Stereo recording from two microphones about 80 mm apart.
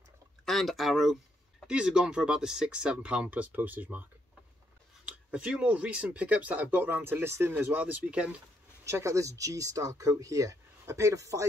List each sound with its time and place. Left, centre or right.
0.5 s speech: centre
1.7 s speech: centre
8.8 s speech: right